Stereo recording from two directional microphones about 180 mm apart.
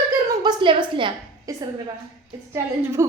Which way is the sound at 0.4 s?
25° right (ahead or behind).